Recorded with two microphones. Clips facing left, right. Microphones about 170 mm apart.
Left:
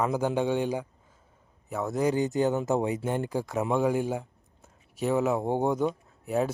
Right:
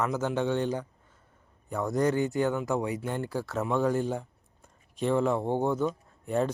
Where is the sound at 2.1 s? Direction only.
20° left (ahead or behind).